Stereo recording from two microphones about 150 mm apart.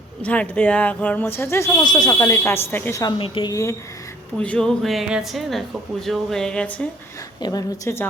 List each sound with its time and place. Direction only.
0.2 s speech: 10° left (ahead or behind)
3.0 s speech: 35° left (ahead or behind)
3.5 s a woman's voice: 20° left (ahead or behind)
4.4 s speech: 5° left (ahead or behind)
7.4 s a woman's voice: 20° left (ahead or behind)